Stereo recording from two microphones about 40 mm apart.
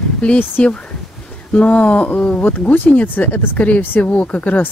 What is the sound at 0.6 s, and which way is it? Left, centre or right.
Speech, left.